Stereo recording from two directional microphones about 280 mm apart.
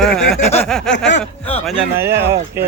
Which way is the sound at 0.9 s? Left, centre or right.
Left.